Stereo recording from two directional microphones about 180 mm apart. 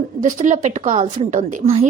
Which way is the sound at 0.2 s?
45° right (ahead or behind).